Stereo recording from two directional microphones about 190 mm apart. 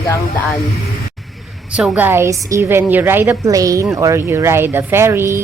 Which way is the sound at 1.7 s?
5° right (ahead or behind).